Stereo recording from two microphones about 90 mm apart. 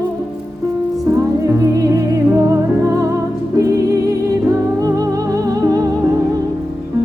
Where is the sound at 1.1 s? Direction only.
35° right (ahead or behind).